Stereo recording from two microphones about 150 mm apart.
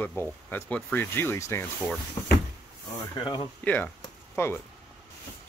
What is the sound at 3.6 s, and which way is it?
Speech, 10° left (ahead or behind).